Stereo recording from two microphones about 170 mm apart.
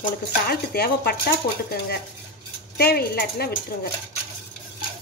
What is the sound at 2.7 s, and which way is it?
Speech, 65° left (ahead or behind).